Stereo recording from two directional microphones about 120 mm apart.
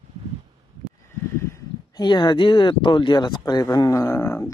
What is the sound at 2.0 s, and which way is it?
Speech, 40° left (ahead or behind).